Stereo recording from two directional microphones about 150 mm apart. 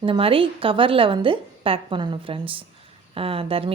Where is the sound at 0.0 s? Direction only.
35° right (ahead or behind).